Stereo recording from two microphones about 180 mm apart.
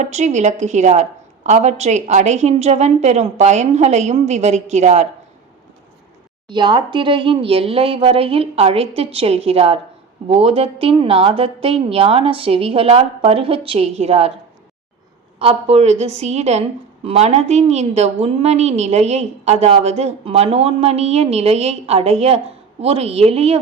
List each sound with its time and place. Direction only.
0.0 s a woman's voice: 40° right (ahead or behind)
6.5 s a woman's voice: 25° right (ahead or behind)
15.4 s a woman's voice: 35° right (ahead or behind)